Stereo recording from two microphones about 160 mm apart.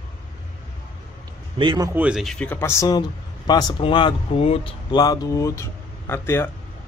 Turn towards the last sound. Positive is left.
turn(degrees=15)  # may be behind; listen again after turning